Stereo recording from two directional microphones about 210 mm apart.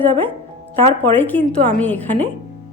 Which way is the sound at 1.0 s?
10° left (ahead or behind).